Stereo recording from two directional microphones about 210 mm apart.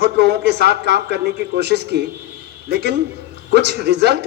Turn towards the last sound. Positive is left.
turn(degrees=-50)  # may be behind; listen again after turning